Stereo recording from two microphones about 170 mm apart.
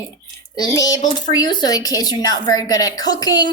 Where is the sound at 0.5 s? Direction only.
20° left (ahead or behind).